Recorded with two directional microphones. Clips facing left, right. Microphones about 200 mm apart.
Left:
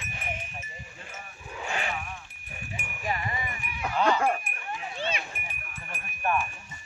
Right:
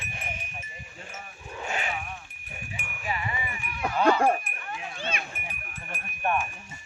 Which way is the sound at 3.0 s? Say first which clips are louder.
Left 1 dB; 40° left (ahead or behind).